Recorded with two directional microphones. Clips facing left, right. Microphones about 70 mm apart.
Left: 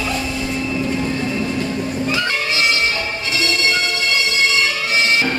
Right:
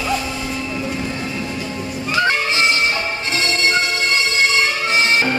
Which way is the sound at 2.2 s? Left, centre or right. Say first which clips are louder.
Right 2 dB; right.